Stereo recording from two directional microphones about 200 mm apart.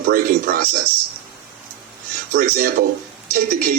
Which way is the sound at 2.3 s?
50° right (ahead or behind).